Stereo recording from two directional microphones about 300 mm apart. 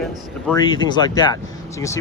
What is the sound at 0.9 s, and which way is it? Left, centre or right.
Speech, centre.